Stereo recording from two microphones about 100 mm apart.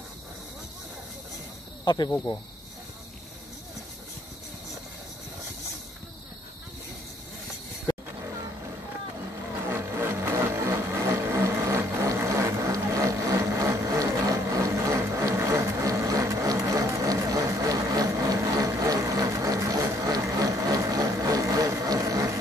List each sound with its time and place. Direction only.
2.0 s speech: 25° left (ahead or behind)
7.9 s music: 40° left (ahead or behind)
9.7 s vehicle: 25° right (ahead or behind)
14.5 s a sound: 30° right (ahead or behind)